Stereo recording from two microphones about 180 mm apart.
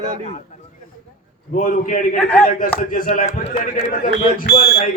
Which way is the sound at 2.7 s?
50° left (ahead or behind).